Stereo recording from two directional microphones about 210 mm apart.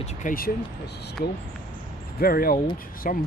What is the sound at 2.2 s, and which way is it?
Speech, 45° left (ahead or behind).